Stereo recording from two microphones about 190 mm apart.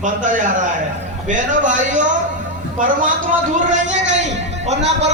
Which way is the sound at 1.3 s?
40° right (ahead or behind).